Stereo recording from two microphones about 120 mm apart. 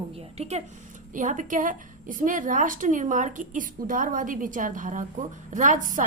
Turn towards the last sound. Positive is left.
turn(degrees=-90)